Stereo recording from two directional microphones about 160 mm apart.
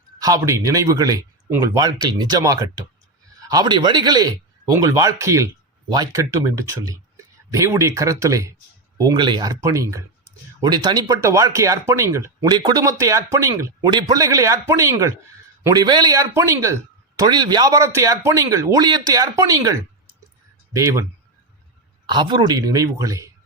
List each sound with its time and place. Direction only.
0.2 s speech: 20° right (ahead or behind)
20.7 s speech: 20° right (ahead or behind)
22.0 s speech: 30° right (ahead or behind)